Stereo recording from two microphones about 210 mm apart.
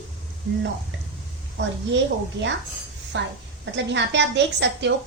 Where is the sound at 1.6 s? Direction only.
60° right (ahead or behind).